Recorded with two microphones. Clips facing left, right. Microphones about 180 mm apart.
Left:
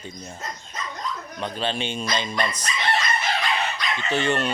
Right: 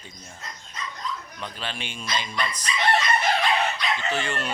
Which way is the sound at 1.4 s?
25° left (ahead or behind).